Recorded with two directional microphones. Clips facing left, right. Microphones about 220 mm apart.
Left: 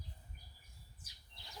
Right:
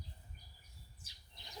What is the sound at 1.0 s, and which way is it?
Chirp, 20° right (ahead or behind).